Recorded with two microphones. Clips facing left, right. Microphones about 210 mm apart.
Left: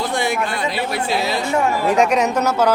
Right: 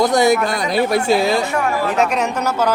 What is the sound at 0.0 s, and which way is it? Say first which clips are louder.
Speech: right 7 dB; 40° right (ahead or behind).